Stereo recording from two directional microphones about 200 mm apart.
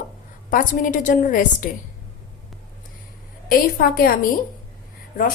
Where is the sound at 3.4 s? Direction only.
45° left (ahead or behind).